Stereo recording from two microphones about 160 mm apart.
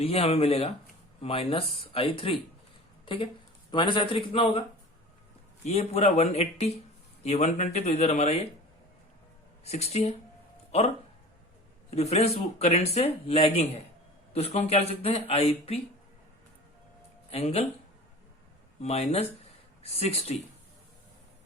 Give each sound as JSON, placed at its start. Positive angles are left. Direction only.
{"t": 0.0, "sound": "speech", "side_deg": 40}
{"t": 3.7, "sound": "speech", "side_deg": 30}
{"t": 5.6, "sound": "speech", "side_deg": 40}
{"t": 9.6, "sound": "speech", "side_deg": 40}
{"t": 17.3, "sound": "speech", "side_deg": 40}
{"t": 18.8, "sound": "speech", "side_deg": 40}